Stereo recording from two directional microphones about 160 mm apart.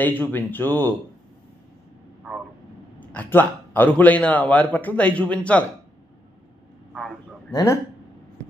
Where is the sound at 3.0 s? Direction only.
10° left (ahead or behind).